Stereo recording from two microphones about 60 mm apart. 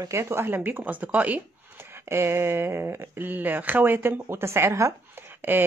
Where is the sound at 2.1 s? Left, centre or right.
Right.